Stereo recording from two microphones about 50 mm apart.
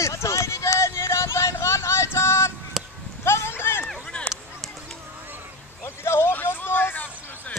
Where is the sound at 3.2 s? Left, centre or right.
Left.